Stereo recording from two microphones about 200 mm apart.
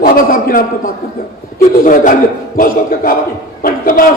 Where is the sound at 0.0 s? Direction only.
45° left (ahead or behind).